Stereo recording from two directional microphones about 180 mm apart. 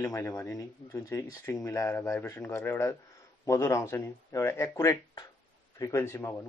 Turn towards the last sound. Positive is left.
turn(degrees=15)  # may be behind; listen again after turning